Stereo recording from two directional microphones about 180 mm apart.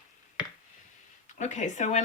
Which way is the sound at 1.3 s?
40° left (ahead or behind).